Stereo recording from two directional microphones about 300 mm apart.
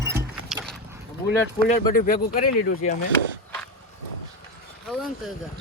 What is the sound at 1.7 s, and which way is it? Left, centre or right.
Speech, left.